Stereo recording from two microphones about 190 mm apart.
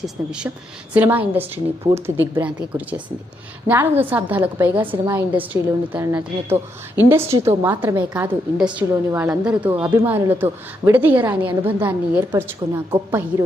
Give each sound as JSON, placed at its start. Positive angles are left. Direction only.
{"t": 0.0, "sound": "a woman's voice", "side_deg": -5}
{"t": 5.0, "sound": "a woman's voice", "side_deg": -20}
{"t": 5.9, "sound": "a woman's voice", "side_deg": -10}